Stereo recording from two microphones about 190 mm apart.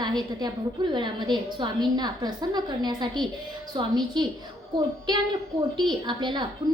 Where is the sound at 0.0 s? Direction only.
20° right (ahead or behind).